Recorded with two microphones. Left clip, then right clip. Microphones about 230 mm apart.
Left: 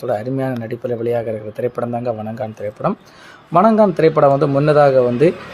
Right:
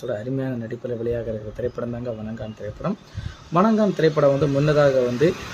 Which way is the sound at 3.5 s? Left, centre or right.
Centre.